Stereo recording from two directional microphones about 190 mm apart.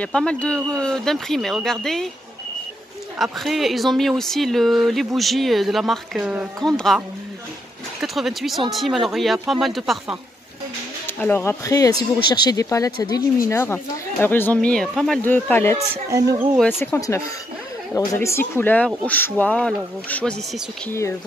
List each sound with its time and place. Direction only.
0.0 s speech: 5° left (ahead or behind)
3.2 s speech: centre (ahead or behind)
8.0 s speech: centre (ahead or behind)
11.1 s speech: 10° left (ahead or behind)
16.1 s speech: 20° right (ahead or behind)
16.5 s speech: 10° left (ahead or behind)